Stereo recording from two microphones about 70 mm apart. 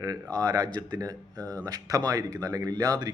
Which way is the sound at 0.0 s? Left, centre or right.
Right.